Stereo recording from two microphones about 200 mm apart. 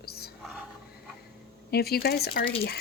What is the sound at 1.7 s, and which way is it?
Speech, 50° left (ahead or behind).